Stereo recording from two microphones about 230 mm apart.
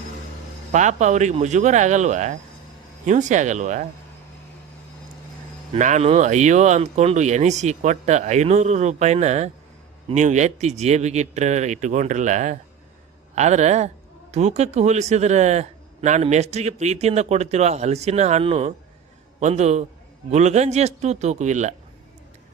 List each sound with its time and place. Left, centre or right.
0.7 s speech: right
5.7 s speech: right